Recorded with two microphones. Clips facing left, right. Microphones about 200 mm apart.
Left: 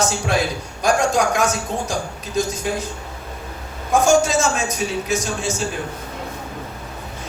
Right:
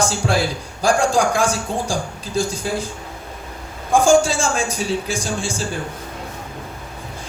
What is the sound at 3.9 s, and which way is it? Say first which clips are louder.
Speech: right 1 dB; 30° right (ahead or behind).